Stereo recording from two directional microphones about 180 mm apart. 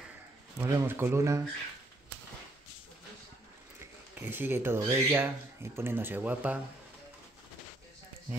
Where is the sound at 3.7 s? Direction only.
10° right (ahead or behind).